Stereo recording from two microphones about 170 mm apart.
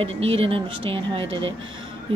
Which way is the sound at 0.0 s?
35° right (ahead or behind).